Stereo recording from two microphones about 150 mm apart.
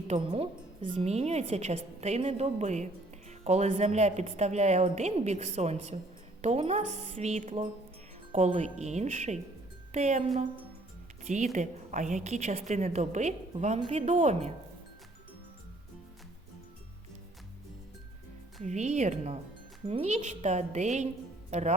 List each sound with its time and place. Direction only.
0.1 s a woman's voice: 40° right (ahead or behind)
18.6 s a woman's voice: 50° right (ahead or behind)